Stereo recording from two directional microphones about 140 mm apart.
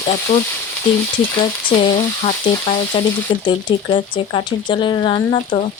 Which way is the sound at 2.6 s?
45° left (ahead or behind).